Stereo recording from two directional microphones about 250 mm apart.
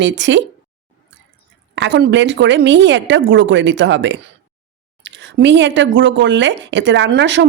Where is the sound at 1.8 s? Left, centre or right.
Right.